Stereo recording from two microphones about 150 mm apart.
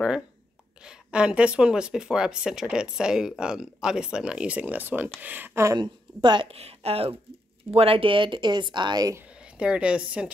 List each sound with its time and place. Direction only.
0.8 s speech: 5° right (ahead or behind)
5.8 s a woman's voice: 30° right (ahead or behind)
9.4 s a woman's voice: 5° right (ahead or behind)